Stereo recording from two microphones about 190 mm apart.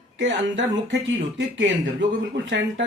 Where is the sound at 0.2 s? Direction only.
75° right (ahead or behind).